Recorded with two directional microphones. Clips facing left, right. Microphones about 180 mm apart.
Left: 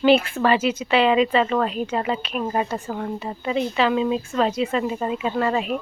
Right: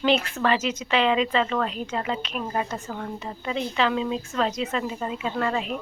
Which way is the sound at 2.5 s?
30° left (ahead or behind).